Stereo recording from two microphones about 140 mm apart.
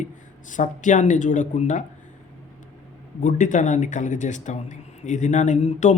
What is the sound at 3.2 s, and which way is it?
Speech, 70° left (ahead or behind).